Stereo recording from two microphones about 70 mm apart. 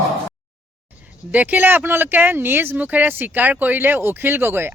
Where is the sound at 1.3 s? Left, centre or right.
Right.